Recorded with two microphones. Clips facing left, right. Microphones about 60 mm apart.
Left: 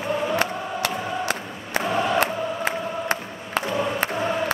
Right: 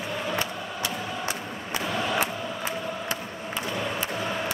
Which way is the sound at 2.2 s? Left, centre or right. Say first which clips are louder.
Left 6 dB; left.